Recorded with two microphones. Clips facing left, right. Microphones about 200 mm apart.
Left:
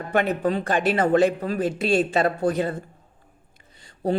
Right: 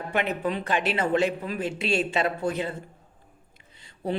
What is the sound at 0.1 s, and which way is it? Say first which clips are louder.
Speech: left 5 dB; 45° left (ahead or behind).